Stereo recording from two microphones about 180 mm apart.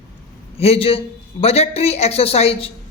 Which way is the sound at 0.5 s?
35° left (ahead or behind).